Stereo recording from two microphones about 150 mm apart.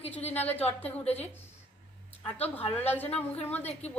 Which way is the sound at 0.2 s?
45° left (ahead or behind).